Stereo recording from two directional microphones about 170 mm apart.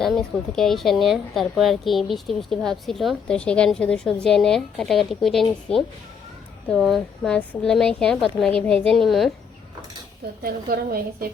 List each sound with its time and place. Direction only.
0.0 s speech: centre (ahead or behind)
10.4 s a woman's voice: 60° right (ahead or behind)